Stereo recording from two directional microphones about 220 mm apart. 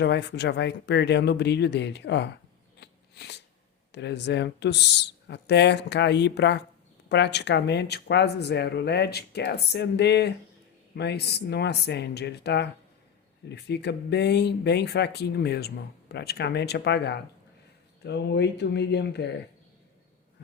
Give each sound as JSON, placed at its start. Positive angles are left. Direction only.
{"t": 0.0, "sound": "speech", "side_deg": 50}
{"t": 2.8, "sound": "a sound", "side_deg": 50}
{"t": 3.9, "sound": "speech", "side_deg": 50}